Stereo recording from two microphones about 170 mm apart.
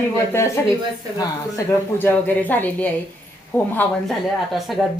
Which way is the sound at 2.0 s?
10° left (ahead or behind).